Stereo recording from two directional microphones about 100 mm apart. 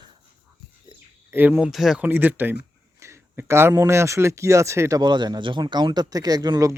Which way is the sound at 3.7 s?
30° right (ahead or behind).